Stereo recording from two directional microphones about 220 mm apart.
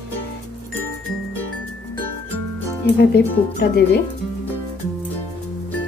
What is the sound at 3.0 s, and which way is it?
Speech, 45° left (ahead or behind).